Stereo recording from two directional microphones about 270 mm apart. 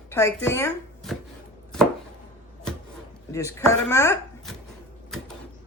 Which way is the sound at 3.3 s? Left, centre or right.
Centre.